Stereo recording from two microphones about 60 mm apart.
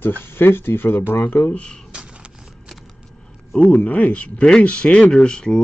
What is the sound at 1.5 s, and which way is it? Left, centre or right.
Speech, centre.